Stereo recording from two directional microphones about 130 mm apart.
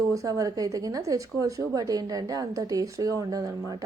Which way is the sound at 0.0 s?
25° right (ahead or behind).